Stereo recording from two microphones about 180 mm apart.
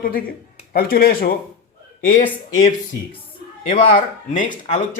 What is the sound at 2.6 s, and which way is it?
Speech, 30° left (ahead or behind).